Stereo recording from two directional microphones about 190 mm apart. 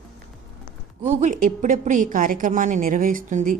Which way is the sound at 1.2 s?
40° right (ahead or behind).